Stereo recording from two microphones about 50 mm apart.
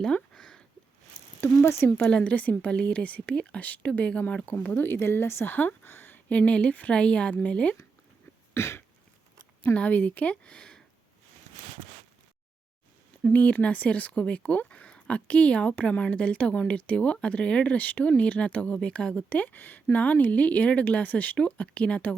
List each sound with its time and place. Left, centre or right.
0.0 s a sound: centre
1.4 s speech: left
2.0 s speech: left
5.0 s speech: left
5.5 s speech: left
8.5 s a sound: left
9.7 s speech: left
13.3 s speech: left
19.1 s speech: left